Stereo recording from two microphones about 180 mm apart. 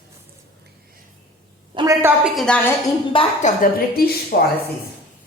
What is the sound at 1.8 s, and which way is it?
Speech, 20° right (ahead or behind).